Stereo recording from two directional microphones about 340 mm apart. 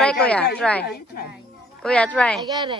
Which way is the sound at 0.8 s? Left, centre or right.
Left.